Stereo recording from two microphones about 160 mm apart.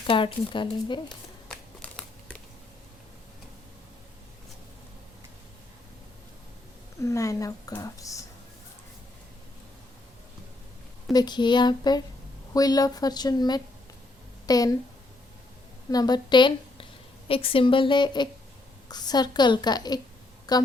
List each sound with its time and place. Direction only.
0.1 s a woman's voice: 35° left (ahead or behind)
1.5 s crumpling: 5° left (ahead or behind)
7.0 s a woman's voice: 20° left (ahead or behind)
11.1 s a woman's voice: 25° left (ahead or behind)
15.9 s a woman's voice: 25° left (ahead or behind)